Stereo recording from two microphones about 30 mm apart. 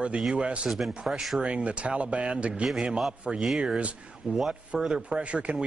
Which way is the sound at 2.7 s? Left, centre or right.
Right.